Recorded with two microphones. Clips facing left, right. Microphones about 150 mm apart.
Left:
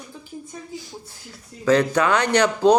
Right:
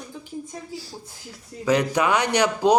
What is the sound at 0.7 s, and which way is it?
Speech, 35° right (ahead or behind).